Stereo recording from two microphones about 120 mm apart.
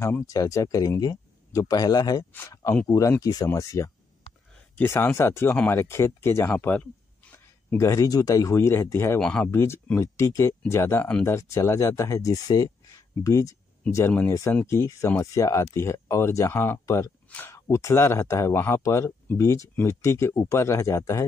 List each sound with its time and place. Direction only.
0.0 s speech: 25° left (ahead or behind)
9.2 s speech: 5° left (ahead or behind)
9.5 s speech: 20° left (ahead or behind)